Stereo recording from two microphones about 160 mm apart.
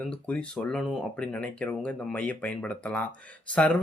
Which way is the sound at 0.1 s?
5° left (ahead or behind).